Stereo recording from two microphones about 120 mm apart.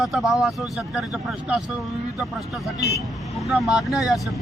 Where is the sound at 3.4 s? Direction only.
5° right (ahead or behind).